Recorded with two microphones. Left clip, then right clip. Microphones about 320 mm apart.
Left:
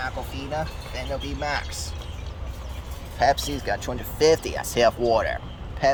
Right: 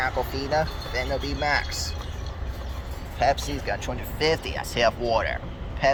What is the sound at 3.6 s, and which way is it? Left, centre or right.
Speech, centre.